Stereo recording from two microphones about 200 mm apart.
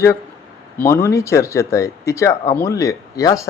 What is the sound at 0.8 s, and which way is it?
Speech, 10° left (ahead or behind).